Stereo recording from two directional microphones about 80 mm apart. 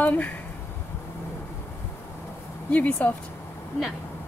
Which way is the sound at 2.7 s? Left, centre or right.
Centre.